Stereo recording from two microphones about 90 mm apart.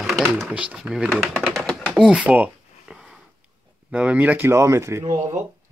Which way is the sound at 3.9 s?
15° right (ahead or behind).